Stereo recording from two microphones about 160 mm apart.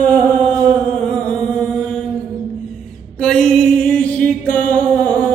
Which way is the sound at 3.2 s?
5° left (ahead or behind).